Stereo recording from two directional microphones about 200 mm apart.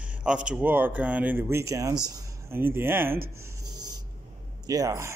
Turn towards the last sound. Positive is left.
turn(degrees=-15)  # may be behind; listen again after turning